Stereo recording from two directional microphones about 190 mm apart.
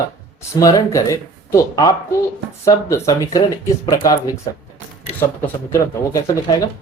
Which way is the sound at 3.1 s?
20° left (ahead or behind).